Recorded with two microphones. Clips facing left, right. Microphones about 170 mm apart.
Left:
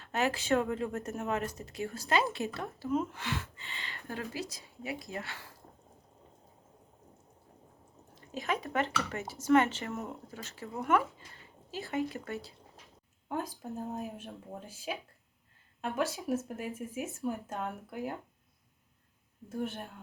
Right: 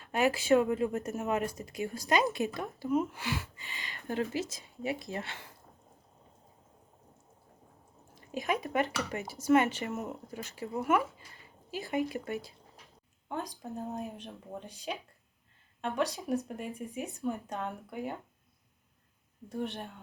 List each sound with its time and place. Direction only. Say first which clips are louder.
0.0 s speech: right 3 dB; 10° right (ahead or behind)
8.3 s speech: right 2 dB; 15° right (ahead or behind)
13.2 s speech: left 1 dB; 5° left (ahead or behind)
19.5 s speech: even; 5° left (ahead or behind)